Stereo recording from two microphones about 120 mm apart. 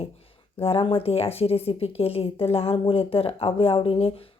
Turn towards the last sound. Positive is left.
turn(degrees=55)  # may be behind; listen again after turning